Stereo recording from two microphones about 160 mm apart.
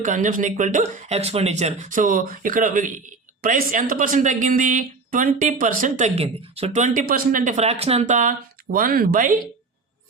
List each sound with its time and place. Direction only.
0.0 s speech: 55° right (ahead or behind)
6.1 s speech: 40° right (ahead or behind); by 9.4 s 60° right (ahead or behind)